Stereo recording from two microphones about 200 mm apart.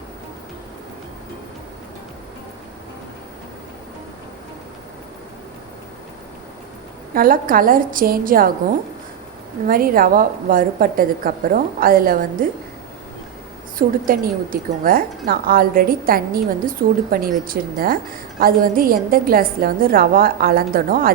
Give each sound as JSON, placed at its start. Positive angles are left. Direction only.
{"t": 7.1, "sound": "a woman's voice", "side_deg": -45}
{"t": 9.6, "sound": "a woman's voice", "side_deg": -45}
{"t": 13.7, "sound": "a woman's voice", "side_deg": -45}